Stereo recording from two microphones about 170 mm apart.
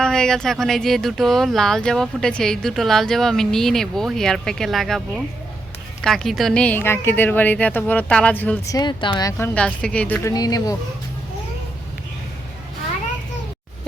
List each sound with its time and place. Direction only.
0.0 s a woman's voice: 5° left (ahead or behind)
8.7 s speech: 25° left (ahead or behind)
9.6 s a woman's voice: 5° left (ahead or behind)
10.3 s speech: 20° left (ahead or behind)